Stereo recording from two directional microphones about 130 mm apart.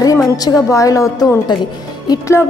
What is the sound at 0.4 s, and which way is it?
A woman's voice, 25° left (ahead or behind).